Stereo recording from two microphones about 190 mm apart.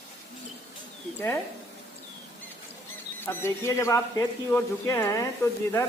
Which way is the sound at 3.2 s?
15° left (ahead or behind).